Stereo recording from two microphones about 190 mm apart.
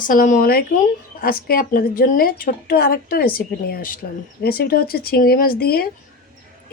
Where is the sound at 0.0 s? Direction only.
45° left (ahead or behind).